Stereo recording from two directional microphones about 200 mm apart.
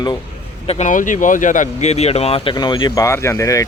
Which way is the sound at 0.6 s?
35° left (ahead or behind).